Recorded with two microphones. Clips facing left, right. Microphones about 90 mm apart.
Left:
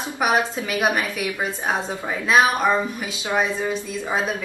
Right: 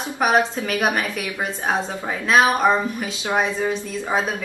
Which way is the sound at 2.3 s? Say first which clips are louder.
Right 1 dB; 20° right (ahead or behind).